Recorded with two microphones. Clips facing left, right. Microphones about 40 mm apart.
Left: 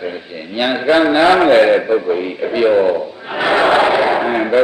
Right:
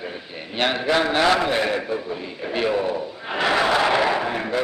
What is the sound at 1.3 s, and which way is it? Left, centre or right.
Speech, left.